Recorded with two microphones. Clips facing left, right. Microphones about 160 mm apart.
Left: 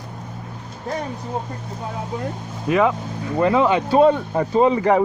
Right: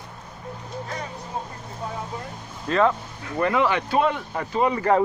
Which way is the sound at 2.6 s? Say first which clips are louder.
Left 3 dB; 10° left (ahead or behind).